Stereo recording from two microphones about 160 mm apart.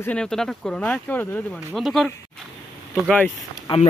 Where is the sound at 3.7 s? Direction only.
35° left (ahead or behind).